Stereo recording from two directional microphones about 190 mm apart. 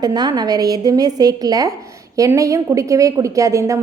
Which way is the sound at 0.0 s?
20° right (ahead or behind).